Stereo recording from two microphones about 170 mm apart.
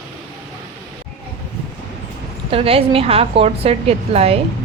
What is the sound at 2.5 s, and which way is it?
Speech, 35° right (ahead or behind).